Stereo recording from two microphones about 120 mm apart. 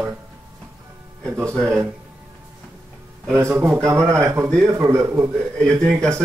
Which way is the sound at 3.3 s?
20° right (ahead or behind).